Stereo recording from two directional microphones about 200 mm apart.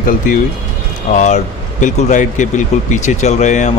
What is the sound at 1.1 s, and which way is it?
Speech, 35° left (ahead or behind).